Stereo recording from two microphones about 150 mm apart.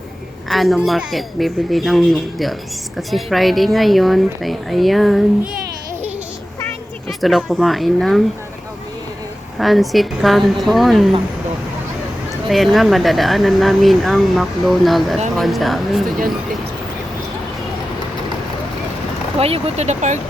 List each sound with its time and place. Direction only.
0.4 s speech: centre (ahead or behind)
7.1 s speech: centre (ahead or behind)
9.6 s speech: centre (ahead or behind)
12.5 s speech: centre (ahead or behind)
19.4 s speech: 40° right (ahead or behind)